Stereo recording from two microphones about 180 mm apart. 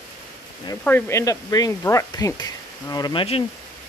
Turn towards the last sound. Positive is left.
turn(degrees=30)  # may be behind; listen again after turning